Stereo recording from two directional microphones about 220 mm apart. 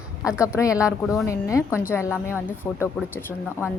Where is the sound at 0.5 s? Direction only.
15° left (ahead or behind).